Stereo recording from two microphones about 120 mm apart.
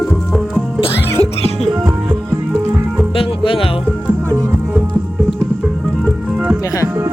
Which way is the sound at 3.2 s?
50° left (ahead or behind).